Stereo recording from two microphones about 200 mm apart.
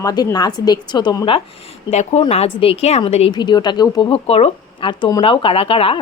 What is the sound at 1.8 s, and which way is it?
A woman's voice, 35° left (ahead or behind).